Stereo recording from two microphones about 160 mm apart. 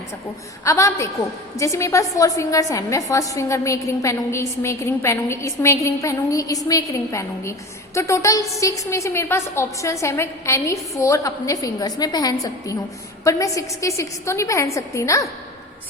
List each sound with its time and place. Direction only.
0.6 s a woman's voice: 20° left (ahead or behind)